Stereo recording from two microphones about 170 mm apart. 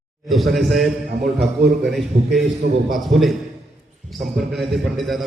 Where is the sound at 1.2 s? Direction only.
75° right (ahead or behind).